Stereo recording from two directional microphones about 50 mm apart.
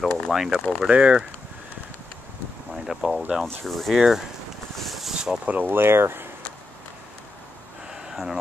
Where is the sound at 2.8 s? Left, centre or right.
Centre.